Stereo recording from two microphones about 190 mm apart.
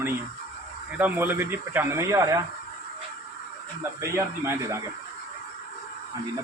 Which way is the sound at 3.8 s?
15° right (ahead or behind).